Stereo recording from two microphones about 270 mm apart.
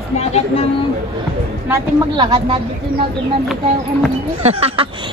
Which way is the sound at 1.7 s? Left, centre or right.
Centre.